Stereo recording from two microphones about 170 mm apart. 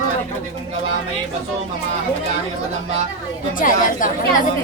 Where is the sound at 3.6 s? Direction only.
50° left (ahead or behind).